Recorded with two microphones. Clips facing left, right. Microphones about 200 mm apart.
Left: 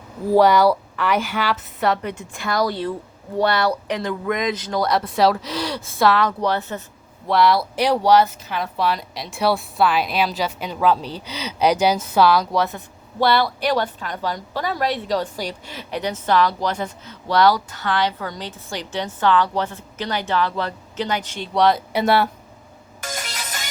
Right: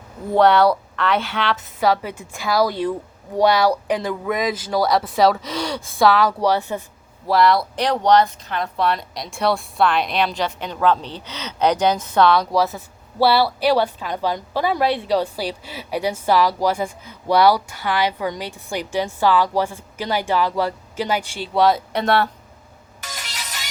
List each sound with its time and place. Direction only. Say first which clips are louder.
0.3 s a woman's voice: even; 10° left (ahead or behind); by 6.8 s 15° right (ahead or behind)
7.3 s a woman's voice: right 1 dB; centre (ahead or behind)
23.0 s music: left 5 dB; 50° left (ahead or behind)